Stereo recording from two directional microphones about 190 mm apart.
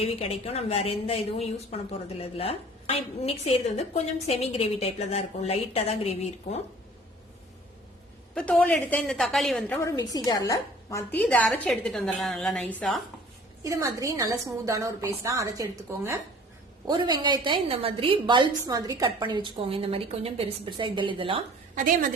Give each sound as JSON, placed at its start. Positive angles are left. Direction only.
{"t": 0.0, "sound": "a woman's voice", "side_deg": 30}
{"t": 8.4, "sound": "a woman's voice", "side_deg": 5}
{"t": 9.9, "sound": "a woman's voice", "side_deg": 20}
{"t": 13.7, "sound": "a woman's voice", "side_deg": -15}